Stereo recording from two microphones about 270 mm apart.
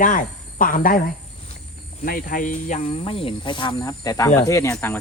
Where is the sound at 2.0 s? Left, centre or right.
Left.